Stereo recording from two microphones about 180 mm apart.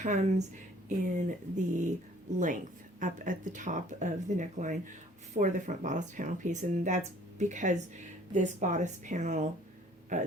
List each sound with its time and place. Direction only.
0.0 s speech: 40° right (ahead or behind)
3.0 s speech: 45° right (ahead or behind)